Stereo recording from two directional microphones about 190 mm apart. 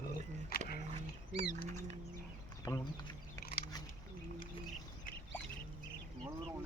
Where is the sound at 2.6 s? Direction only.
15° left (ahead or behind).